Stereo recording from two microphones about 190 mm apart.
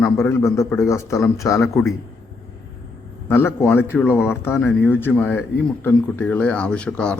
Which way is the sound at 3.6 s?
10° left (ahead or behind).